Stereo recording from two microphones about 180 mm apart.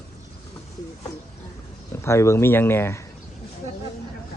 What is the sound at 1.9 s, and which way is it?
A man's voice, 15° left (ahead or behind).